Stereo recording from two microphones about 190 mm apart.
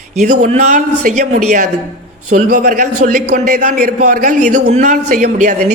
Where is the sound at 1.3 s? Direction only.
40° right (ahead or behind).